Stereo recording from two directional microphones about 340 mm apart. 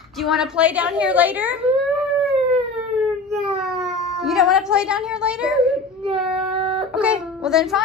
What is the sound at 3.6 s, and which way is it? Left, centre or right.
Cat, centre.